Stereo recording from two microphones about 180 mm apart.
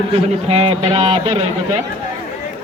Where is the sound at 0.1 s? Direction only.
35° right (ahead or behind).